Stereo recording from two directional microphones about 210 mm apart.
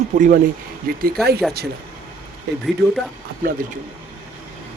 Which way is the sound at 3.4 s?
40° right (ahead or behind).